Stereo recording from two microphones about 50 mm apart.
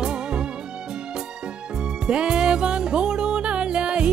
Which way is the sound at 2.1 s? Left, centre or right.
Centre.